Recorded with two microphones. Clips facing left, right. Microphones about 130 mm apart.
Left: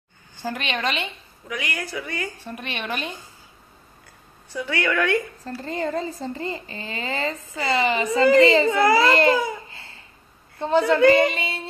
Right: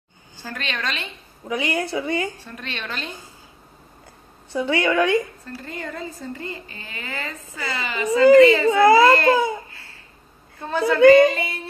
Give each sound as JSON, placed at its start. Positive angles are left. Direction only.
{"t": 0.4, "sound": "a woman's voice", "side_deg": 15}
{"t": 1.5, "sound": "a woman's voice", "side_deg": -25}
{"t": 2.3, "sound": "a woman's voice", "side_deg": 15}
{"t": 4.5, "sound": "a woman's voice", "side_deg": -25}
{"t": 5.4, "sound": "speech", "side_deg": 30}
{"t": 8.6, "sound": "a woman's voice", "side_deg": -20}
{"t": 9.7, "sound": "babbling", "side_deg": 25}
{"t": 10.6, "sound": "speech", "side_deg": 25}